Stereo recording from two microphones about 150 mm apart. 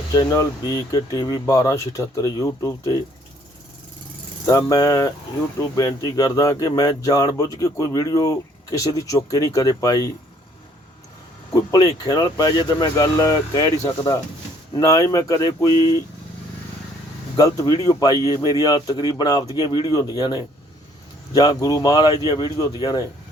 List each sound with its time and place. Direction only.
0.1 s speech: 20° left (ahead or behind)
4.4 s speech: 25° left (ahead or behind)
11.5 s speech: 25° left (ahead or behind)
17.3 s speech: 25° left (ahead or behind)